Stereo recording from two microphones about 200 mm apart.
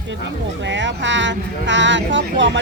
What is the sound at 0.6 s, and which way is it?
Speech, 65° right (ahead or behind).